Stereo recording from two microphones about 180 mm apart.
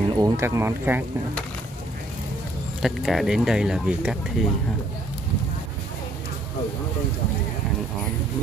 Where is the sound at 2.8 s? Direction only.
Centre (ahead or behind).